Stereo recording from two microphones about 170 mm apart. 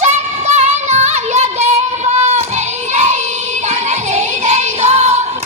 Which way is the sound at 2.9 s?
40° right (ahead or behind).